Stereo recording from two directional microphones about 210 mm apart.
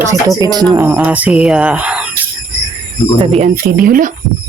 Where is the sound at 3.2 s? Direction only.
30° right (ahead or behind).